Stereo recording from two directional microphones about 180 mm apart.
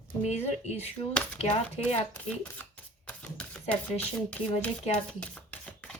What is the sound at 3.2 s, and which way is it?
Shuffling cards, 5° left (ahead or behind).